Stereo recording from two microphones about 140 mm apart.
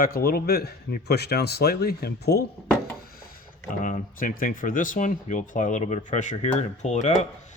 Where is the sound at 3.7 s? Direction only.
75° left (ahead or behind); by 7.3 s 60° left (ahead or behind).